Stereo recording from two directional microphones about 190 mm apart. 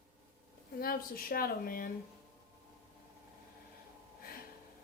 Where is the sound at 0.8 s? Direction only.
50° left (ahead or behind).